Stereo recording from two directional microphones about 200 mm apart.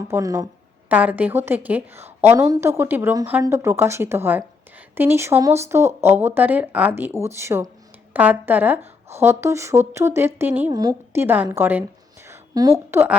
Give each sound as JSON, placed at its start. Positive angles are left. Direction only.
{"t": 0.1, "sound": "a woman's voice", "side_deg": -15}
{"t": 12.3, "sound": "a sound", "side_deg": -20}
{"t": 12.9, "sound": "a woman's voice", "side_deg": -10}